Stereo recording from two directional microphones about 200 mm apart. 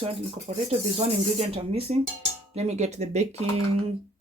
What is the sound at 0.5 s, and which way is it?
Speech, 35° right (ahead or behind).